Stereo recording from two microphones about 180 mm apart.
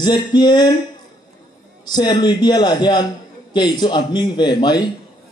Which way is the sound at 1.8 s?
25° left (ahead or behind).